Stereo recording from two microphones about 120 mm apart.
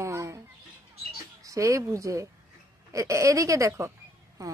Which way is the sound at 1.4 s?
25° right (ahead or behind).